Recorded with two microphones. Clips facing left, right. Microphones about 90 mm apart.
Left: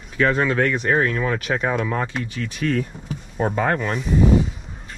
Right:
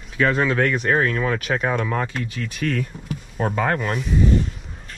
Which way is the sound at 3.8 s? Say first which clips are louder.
Left 2 dB; centre (ahead or behind).